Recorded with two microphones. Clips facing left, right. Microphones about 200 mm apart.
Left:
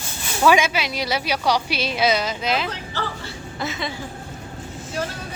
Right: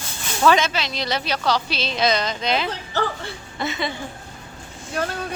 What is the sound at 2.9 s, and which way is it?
Speech, 50° right (ahead or behind).